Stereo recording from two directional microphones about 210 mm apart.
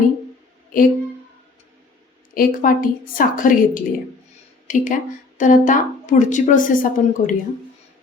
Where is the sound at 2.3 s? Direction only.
40° left (ahead or behind).